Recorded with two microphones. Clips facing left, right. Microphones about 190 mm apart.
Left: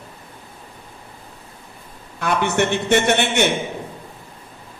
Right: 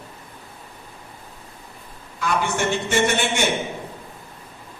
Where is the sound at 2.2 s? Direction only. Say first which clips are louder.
Left 4 dB; 60° left (ahead or behind).